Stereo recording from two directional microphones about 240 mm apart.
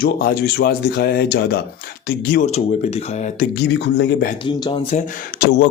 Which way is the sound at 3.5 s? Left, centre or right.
Left.